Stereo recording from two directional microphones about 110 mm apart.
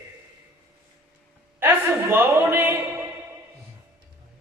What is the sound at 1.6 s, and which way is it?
A man's voice, 20° right (ahead or behind).